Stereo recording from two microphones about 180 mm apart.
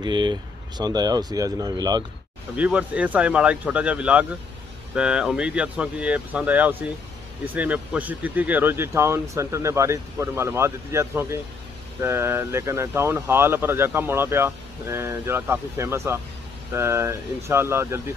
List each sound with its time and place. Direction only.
0.0 s speech: 25° right (ahead or behind)
2.5 s speech: 10° right (ahead or behind)